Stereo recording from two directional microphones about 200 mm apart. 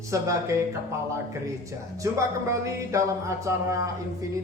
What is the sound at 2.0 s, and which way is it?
Music, 15° right (ahead or behind).